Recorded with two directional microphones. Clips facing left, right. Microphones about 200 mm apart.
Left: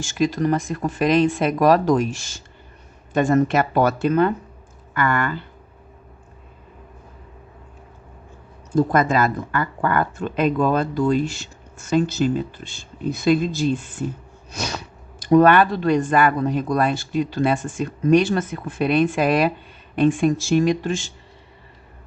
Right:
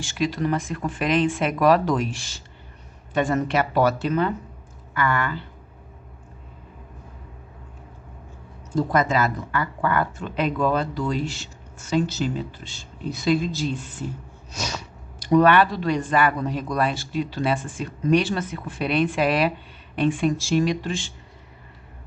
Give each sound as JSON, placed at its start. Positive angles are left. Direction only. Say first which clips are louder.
{"t": 0.0, "sound": "speech", "louder": "left 4 dB", "side_deg": 45}
{"t": 8.7, "sound": "speech", "louder": "left 3 dB", "side_deg": 50}
{"t": 14.5, "sound": "a sound", "louder": "left 3 dB", "side_deg": 55}
{"t": 15.2, "sound": "speech", "louder": "left 3 dB", "side_deg": 50}